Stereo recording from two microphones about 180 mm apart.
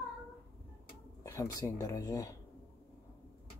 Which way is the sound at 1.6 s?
20° left (ahead or behind).